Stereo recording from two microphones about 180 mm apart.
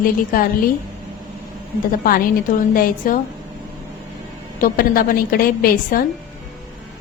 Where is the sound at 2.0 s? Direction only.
55° left (ahead or behind).